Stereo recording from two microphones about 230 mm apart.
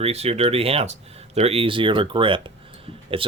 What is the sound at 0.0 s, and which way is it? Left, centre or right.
Speech, right.